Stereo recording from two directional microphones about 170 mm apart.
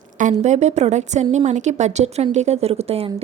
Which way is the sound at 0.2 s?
45° right (ahead or behind).